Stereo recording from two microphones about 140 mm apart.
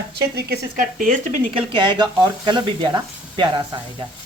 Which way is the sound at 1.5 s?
35° right (ahead or behind).